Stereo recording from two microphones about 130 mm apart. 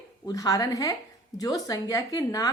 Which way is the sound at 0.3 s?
25° left (ahead or behind).